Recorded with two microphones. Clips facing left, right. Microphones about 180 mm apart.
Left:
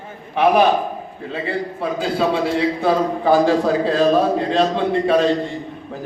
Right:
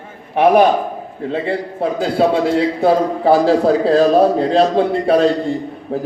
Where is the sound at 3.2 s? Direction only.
35° right (ahead or behind).